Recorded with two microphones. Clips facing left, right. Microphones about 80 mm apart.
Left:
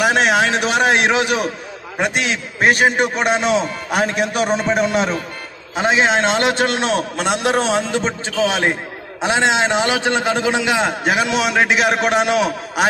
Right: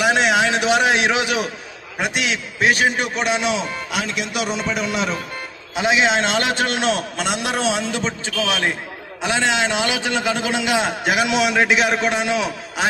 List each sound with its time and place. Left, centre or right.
0.0 s a sound: left
2.0 s a man's voice: left
11.9 s a man's voice: left